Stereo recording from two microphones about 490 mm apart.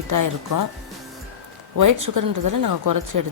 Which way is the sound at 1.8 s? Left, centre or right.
Right.